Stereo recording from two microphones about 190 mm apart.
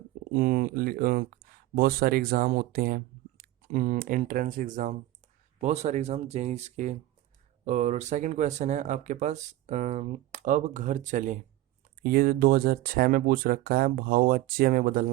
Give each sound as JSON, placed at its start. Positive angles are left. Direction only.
{"t": 0.3, "sound": "speech", "side_deg": -50}